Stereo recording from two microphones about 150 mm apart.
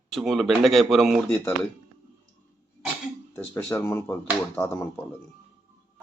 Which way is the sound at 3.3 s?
10° left (ahead or behind).